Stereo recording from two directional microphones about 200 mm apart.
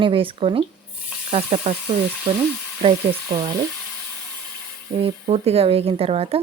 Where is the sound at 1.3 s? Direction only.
30° right (ahead or behind).